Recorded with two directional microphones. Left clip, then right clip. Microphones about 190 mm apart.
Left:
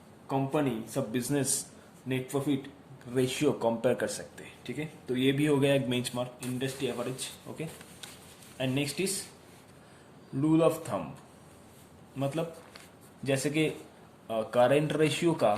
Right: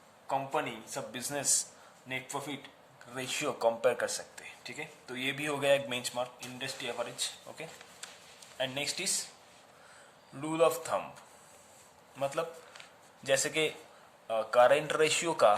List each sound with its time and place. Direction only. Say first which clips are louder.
0.3 s speech: left 3 dB; 15° right (ahead or behind)
8.5 s speech: left 2 dB; 15° right (ahead or behind)
10.4 s speech: left 3 dB; 20° right (ahead or behind)
12.1 s speech: even; 20° right (ahead or behind)
14.3 s speech: right 1 dB; 15° right (ahead or behind)